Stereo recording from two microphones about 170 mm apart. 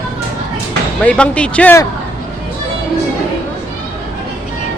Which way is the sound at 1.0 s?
5° left (ahead or behind).